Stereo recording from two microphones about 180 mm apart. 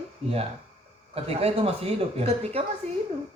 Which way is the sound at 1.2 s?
35° right (ahead or behind).